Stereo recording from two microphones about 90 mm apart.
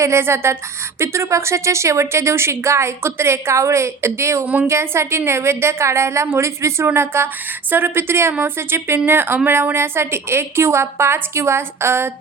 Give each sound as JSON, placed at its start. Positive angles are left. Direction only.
{"t": 0.0, "sound": "a woman's voice", "side_deg": -30}